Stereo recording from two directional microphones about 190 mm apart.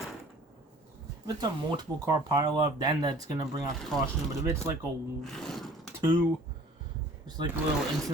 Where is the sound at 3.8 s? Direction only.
Centre (ahead or behind).